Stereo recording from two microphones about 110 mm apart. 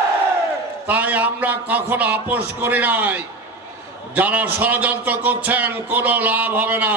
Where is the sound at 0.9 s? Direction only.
15° right (ahead or behind).